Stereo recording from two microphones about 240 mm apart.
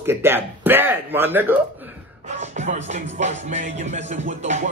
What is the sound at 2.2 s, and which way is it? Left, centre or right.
Music, right.